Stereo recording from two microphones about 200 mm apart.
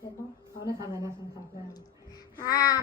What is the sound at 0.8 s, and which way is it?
Speech, 15° right (ahead or behind).